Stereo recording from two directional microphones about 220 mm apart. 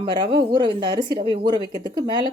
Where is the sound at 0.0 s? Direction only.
20° right (ahead or behind).